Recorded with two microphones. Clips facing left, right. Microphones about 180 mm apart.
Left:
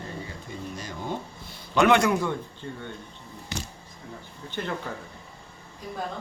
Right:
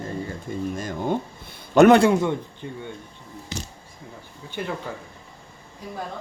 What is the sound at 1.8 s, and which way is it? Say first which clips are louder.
A man's voice: right 7 dB; 35° right (ahead or behind).